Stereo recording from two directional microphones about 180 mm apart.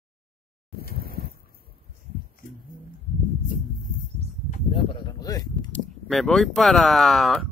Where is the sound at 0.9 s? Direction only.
60° right (ahead or behind).